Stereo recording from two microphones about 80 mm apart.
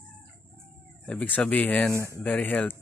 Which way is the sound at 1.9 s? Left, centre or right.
Left.